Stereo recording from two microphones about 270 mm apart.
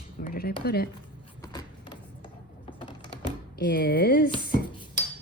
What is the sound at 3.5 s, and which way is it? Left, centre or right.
Speech, left.